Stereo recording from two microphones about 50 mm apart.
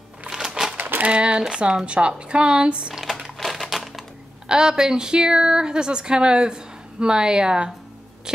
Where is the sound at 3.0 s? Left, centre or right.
Centre.